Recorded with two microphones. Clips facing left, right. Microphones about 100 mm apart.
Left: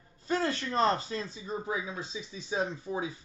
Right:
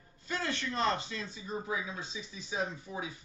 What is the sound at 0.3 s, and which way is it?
A man's voice, 35° left (ahead or behind).